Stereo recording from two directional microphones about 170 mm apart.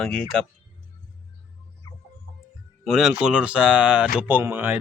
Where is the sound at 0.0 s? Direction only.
5° left (ahead or behind).